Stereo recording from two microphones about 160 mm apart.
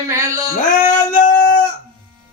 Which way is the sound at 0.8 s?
55° left (ahead or behind).